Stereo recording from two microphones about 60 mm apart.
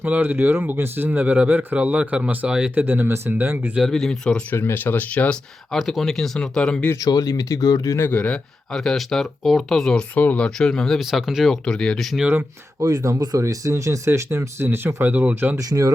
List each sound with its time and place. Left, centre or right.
0.0 s speech: right
2.7 s speech: right
3.8 s speech: centre
4.5 s speech: left
5.7 s speech: centre
7.0 s speech: left
8.1 s speech: left
8.7 s speech: centre
10.2 s speech: left
10.4 s speech: centre
11.1 s speech: centre
11.6 s speech: centre
12.8 s speech: right
15.5 s speech: right